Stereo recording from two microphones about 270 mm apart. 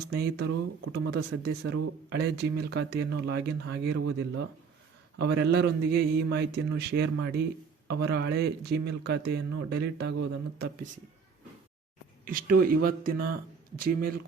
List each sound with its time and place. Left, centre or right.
0.1 s speech: right
12.2 s speech: right